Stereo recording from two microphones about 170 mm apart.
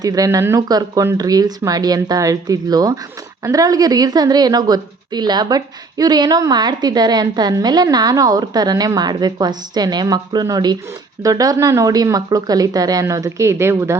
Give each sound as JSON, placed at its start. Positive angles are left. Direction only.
{"t": 0.0, "sound": "a woman's voice", "side_deg": -20}